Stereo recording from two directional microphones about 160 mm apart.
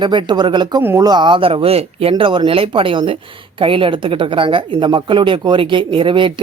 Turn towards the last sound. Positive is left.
turn(degrees=-35)  # may be behind; listen again after turning